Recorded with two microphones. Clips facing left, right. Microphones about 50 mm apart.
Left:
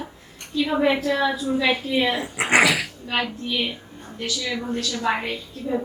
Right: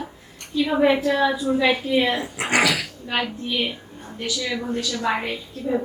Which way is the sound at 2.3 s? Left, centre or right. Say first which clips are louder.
Left 5 dB; left.